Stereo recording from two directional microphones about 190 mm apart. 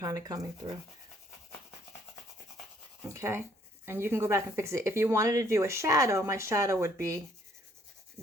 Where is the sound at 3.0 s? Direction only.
15° right (ahead or behind).